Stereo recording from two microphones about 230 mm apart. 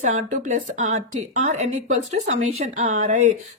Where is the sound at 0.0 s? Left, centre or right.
Right.